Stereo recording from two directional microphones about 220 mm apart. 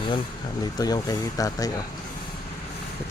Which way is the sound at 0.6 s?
15° left (ahead or behind).